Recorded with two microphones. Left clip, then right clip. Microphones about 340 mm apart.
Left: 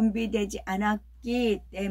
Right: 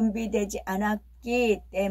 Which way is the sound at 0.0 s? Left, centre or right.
Centre.